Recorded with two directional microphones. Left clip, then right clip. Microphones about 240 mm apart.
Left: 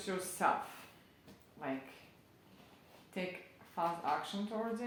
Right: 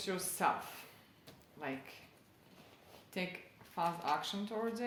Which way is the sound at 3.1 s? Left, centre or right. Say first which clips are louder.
Even; right.